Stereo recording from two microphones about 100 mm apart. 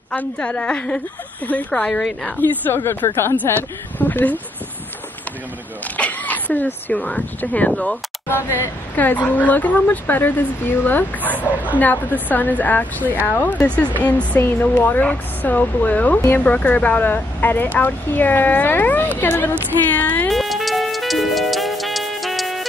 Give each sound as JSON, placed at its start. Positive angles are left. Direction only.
{"t": 0.1, "sound": "speech", "side_deg": 15}
{"t": 2.6, "sound": "speech", "side_deg": 25}
{"t": 5.9, "sound": "speech", "side_deg": 15}
{"t": 8.3, "sound": "speech", "side_deg": 20}
{"t": 19.9, "sound": "a sound", "side_deg": 15}
{"t": 20.2, "sound": "music", "side_deg": 0}